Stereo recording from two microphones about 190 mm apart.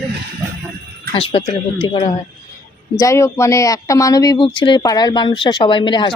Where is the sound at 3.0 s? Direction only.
15° left (ahead or behind).